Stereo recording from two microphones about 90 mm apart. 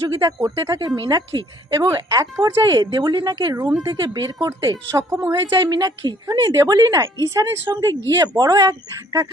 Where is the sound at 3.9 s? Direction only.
50° right (ahead or behind).